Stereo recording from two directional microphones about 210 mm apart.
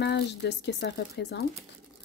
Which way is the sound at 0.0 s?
55° left (ahead or behind).